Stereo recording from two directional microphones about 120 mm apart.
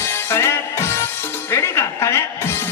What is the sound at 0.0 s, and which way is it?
Music, 20° left (ahead or behind).